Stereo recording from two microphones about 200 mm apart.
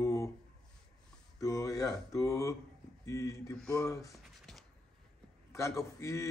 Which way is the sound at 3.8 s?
15° left (ahead or behind).